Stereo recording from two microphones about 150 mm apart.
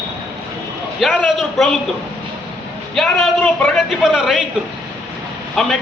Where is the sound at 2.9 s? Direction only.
5° left (ahead or behind).